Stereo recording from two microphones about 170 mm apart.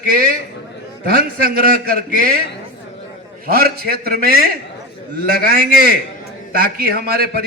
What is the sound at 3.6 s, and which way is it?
A man's voice, 65° right (ahead or behind).